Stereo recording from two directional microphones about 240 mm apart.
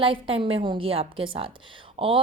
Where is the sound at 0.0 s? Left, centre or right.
Right.